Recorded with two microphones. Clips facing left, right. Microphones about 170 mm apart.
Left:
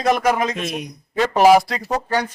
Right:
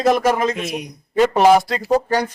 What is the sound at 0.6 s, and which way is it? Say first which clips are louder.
Speech: right 1 dB; 20° right (ahead or behind).